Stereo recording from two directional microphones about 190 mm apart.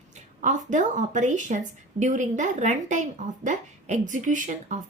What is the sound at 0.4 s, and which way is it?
A woman's voice, 40° right (ahead or behind).